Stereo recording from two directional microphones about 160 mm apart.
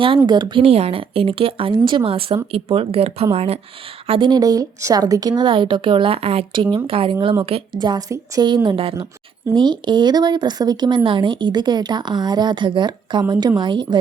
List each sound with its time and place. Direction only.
0.3 s a woman's voice: 30° right (ahead or behind)